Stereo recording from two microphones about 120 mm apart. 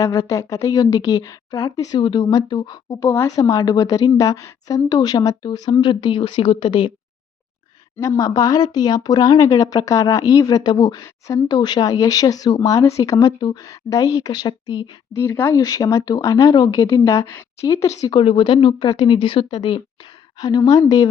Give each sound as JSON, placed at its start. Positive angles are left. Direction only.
{"t": 0.0, "sound": "speech", "side_deg": 30}
{"t": 2.0, "sound": "speech", "side_deg": 40}
{"t": 7.9, "sound": "speech", "side_deg": 25}
{"t": 15.1, "sound": "speech", "side_deg": 20}
{"t": 18.0, "sound": "speech", "side_deg": 45}
{"t": 20.4, "sound": "speech", "side_deg": 35}